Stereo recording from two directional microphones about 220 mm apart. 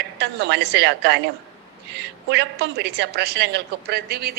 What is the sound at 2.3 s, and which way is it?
A woman's voice, 50° right (ahead or behind).